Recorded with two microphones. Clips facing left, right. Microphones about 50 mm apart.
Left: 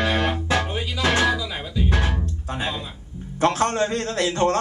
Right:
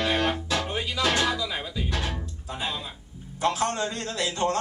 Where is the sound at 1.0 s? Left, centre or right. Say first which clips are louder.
Left 4 dB; left.